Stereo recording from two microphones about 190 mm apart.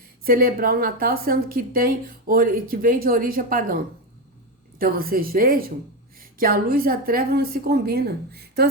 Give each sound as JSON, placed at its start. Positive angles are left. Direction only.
{"t": 0.3, "sound": "a woman's voice", "side_deg": -50}
{"t": 4.8, "sound": "a woman's voice", "side_deg": -50}